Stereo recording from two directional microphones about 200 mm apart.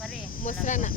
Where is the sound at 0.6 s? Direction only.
40° left (ahead or behind).